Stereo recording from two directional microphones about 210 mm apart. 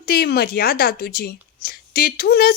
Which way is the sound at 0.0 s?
45° left (ahead or behind).